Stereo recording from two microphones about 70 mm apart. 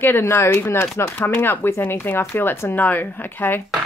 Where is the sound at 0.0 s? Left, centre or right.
Left.